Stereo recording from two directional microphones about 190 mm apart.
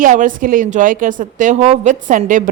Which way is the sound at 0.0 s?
40° right (ahead or behind).